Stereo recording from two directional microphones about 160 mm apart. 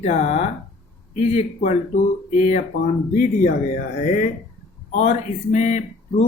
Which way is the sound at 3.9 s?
50° left (ahead or behind).